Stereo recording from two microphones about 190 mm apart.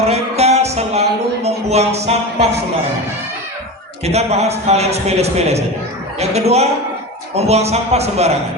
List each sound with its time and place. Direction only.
0.0 s music: 35° right (ahead or behind)
4.0 s a man's voice: 35° right (ahead or behind)